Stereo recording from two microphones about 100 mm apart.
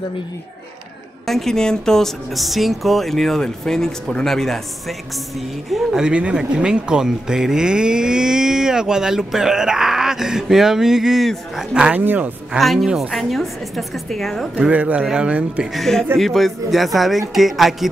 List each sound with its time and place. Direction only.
1.2 s speech: 5° left (ahead or behind); by 12.3 s 20° right (ahead or behind)
12.5 s speech: centre (ahead or behind)
14.6 s speech: 15° right (ahead or behind)
15.8 s speech: 5° left (ahead or behind)